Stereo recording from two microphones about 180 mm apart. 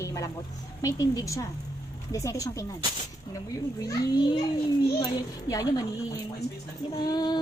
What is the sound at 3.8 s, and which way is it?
A woman's voice, 20° left (ahead or behind).